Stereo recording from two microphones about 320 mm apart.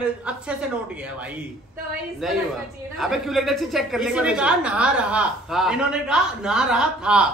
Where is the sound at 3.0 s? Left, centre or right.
Centre.